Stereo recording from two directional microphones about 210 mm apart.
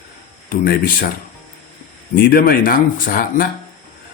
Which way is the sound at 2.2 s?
45° left (ahead or behind).